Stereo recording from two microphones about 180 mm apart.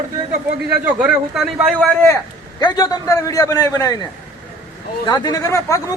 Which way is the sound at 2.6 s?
20° left (ahead or behind).